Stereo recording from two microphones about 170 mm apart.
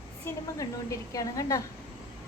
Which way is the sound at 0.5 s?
20° left (ahead or behind).